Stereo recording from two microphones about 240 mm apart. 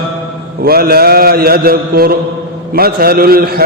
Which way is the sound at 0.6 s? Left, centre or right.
Right.